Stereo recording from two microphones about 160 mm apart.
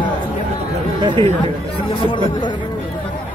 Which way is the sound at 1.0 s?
30° right (ahead or behind).